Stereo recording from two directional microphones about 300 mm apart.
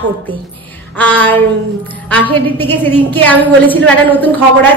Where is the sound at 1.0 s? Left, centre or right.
Centre.